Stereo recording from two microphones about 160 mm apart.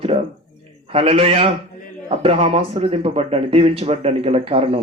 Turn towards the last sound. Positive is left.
turn(degrees=-40)  # may be behind; listen again after turning